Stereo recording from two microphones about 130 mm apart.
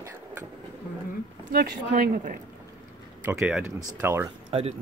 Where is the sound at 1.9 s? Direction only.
90° right.